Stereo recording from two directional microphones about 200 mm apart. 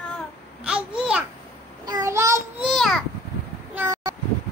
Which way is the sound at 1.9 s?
15° right (ahead or behind).